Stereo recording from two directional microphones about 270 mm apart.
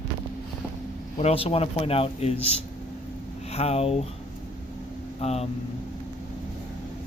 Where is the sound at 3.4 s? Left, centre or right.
Left.